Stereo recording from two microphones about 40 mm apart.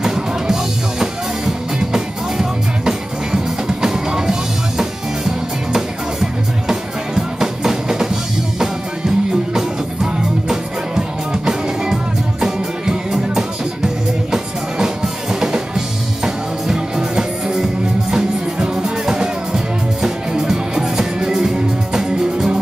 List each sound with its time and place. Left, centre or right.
0.0 s music: centre
15.4 s music: centre
17.1 s music: centre